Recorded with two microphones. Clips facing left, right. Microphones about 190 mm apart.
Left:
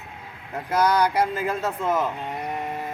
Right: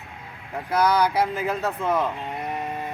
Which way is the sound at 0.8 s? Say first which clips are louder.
Even; centre (ahead or behind).